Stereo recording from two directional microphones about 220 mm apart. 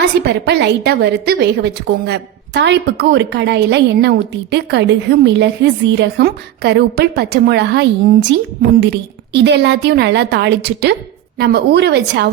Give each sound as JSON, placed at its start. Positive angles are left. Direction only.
{"t": 0.3, "sound": "a woman's voice", "side_deg": -50}